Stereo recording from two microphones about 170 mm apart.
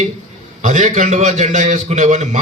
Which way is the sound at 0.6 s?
45° right (ahead or behind).